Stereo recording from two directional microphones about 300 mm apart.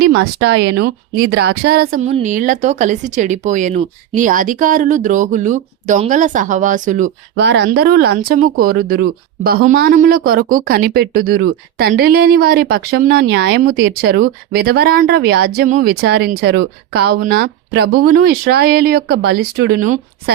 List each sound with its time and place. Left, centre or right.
0.0 s a woman's voice: right